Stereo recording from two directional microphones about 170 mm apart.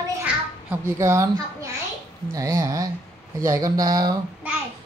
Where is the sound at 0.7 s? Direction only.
15° right (ahead or behind).